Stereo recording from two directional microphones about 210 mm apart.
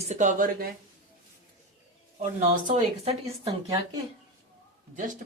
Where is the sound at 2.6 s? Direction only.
30° right (ahead or behind).